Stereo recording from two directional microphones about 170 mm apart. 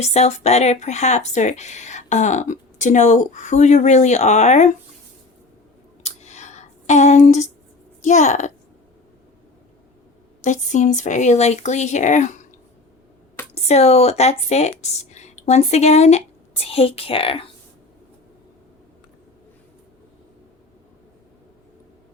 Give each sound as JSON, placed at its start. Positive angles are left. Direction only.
{"t": 0.0, "sound": "speech", "side_deg": 40}
{"t": 6.0, "sound": "a sound", "side_deg": 40}
{"t": 8.0, "sound": "speech", "side_deg": 45}
{"t": 10.4, "sound": "speech", "side_deg": 45}
{"t": 13.5, "sound": "speech", "side_deg": 40}